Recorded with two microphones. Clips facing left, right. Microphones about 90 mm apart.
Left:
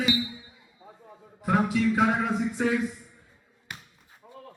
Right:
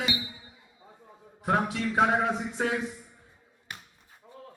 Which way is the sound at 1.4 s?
45° right (ahead or behind).